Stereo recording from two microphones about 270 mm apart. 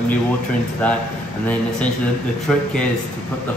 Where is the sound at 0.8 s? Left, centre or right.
Centre.